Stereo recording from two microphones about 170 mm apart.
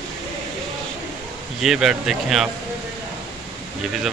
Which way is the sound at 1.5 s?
Centre (ahead or behind).